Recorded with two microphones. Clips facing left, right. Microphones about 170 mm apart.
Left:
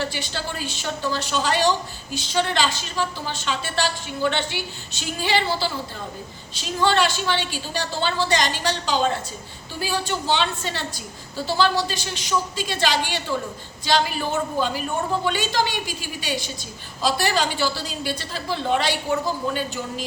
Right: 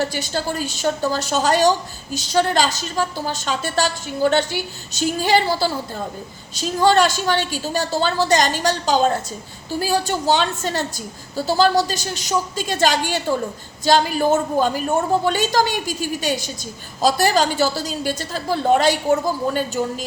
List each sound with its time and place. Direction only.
0.0 s a woman's voice: 45° right (ahead or behind)